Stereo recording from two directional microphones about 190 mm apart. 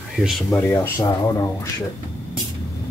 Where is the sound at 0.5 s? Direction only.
10° left (ahead or behind).